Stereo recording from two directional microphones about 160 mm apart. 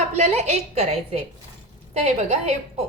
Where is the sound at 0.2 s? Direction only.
40° right (ahead or behind).